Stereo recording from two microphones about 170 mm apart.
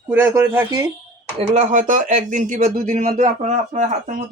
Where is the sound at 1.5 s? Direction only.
45° right (ahead or behind).